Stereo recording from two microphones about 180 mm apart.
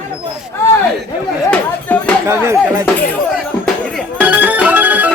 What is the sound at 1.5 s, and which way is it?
Chatter, 5° left (ahead or behind).